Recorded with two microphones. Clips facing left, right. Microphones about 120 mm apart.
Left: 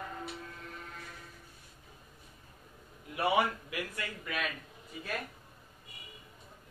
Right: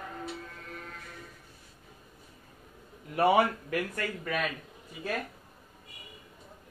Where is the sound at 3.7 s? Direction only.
50° right (ahead or behind).